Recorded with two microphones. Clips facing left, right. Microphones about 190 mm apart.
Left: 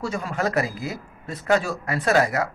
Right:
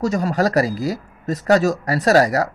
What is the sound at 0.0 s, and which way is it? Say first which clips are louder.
Speech: right 7 dB; 40° right (ahead or behind).